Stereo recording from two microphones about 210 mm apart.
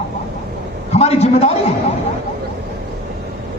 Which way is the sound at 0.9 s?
30° left (ahead or behind).